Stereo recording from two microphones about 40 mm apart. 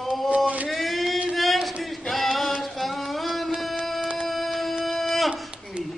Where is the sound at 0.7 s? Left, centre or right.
Centre.